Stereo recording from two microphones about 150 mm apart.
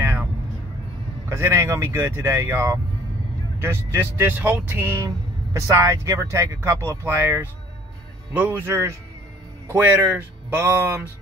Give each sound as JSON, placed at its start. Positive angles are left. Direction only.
{"t": 0.0, "sound": "vehicle", "side_deg": -15}
{"t": 1.3, "sound": "speech", "side_deg": -15}